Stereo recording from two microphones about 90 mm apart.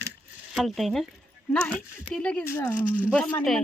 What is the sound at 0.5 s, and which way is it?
Speech, centre (ahead or behind).